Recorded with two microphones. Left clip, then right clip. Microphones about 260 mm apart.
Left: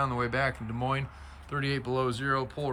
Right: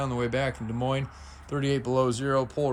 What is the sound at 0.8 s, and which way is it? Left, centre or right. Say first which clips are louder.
Speech: right 4 dB; centre.